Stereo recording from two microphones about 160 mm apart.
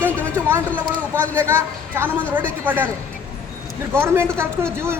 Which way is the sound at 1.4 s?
15° right (ahead or behind).